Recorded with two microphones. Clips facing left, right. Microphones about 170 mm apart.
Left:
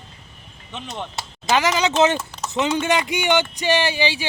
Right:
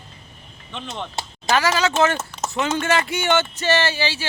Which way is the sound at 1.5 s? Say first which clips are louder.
Left 1 dB; 15° left (ahead or behind).